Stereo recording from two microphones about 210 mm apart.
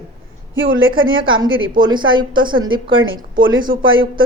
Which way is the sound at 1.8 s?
20° right (ahead or behind).